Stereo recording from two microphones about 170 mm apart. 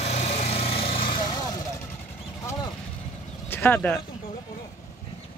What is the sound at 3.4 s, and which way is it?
Speech, 10° left (ahead or behind).